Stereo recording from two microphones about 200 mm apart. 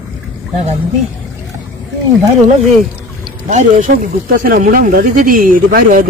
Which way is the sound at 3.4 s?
40° right (ahead or behind).